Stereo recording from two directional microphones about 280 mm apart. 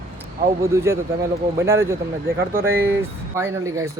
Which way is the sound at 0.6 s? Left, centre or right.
Centre.